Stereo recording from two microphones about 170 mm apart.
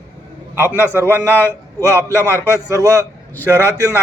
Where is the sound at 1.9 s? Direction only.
15° left (ahead or behind).